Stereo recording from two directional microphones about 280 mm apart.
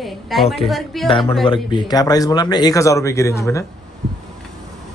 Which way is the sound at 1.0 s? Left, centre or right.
Centre.